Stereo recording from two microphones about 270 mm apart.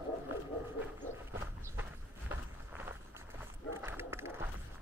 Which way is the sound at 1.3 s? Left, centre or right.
Centre.